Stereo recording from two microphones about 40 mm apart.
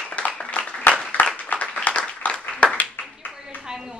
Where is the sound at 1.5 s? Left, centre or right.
Left.